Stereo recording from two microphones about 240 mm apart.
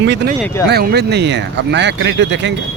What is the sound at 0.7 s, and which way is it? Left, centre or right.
Speech, right.